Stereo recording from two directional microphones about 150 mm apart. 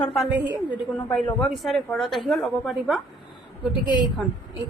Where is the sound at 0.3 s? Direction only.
10° right (ahead or behind).